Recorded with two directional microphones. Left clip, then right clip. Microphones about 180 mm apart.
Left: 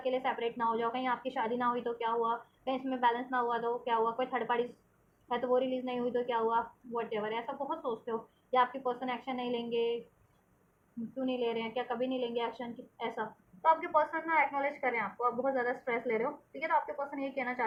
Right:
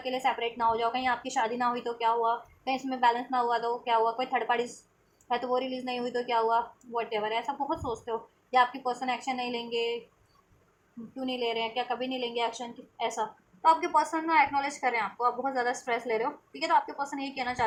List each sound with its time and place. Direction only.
0.0 s a woman's voice: 30° right (ahead or behind)
11.3 s a woman's voice: 30° right (ahead or behind)